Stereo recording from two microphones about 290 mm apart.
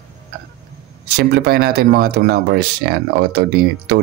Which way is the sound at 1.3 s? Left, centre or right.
Right.